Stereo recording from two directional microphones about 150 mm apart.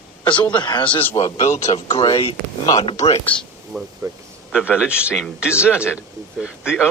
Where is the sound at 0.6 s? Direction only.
30° left (ahead or behind).